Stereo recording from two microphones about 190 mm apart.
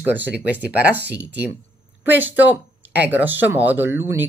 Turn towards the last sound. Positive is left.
turn(degrees=-10)  # may be behind; listen again after turning